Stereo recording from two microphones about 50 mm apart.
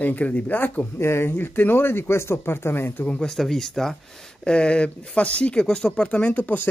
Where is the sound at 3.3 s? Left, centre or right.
Centre.